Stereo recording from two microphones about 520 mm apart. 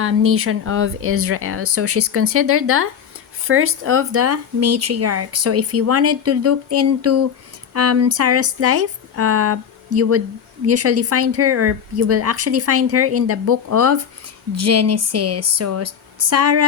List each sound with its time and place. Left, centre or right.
0.0 s speech: right